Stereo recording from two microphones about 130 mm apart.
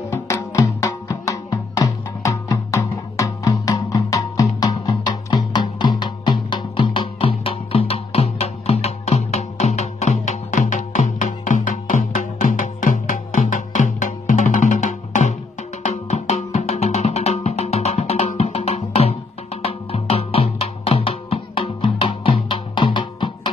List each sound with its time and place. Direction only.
0.1 s music: 20° left (ahead or behind)